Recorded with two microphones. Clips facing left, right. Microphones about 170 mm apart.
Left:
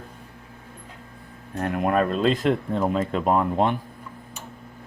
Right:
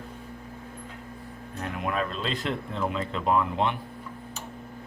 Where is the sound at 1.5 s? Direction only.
55° left (ahead or behind).